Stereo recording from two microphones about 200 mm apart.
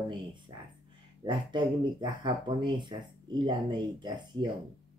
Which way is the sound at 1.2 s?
20° right (ahead or behind).